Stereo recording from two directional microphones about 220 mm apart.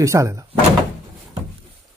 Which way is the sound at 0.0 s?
15° right (ahead or behind).